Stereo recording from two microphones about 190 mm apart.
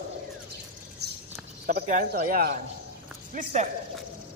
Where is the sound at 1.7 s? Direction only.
50° right (ahead or behind).